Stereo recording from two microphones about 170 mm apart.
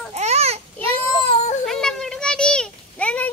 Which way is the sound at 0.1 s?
40° right (ahead or behind).